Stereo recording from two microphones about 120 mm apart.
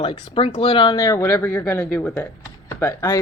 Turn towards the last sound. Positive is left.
turn(degrees=25)  # may be behind; listen again after turning